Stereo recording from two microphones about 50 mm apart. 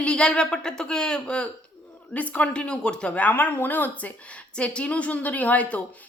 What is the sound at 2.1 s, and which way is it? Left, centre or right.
Speech, left.